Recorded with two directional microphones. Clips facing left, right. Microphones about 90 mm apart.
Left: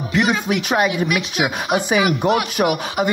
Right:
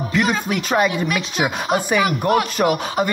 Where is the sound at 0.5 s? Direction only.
15° left (ahead or behind).